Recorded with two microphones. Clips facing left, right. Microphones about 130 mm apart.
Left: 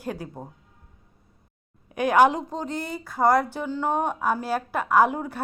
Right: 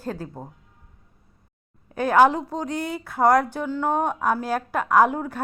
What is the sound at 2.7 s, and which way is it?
A woman's voice, 60° right (ahead or behind).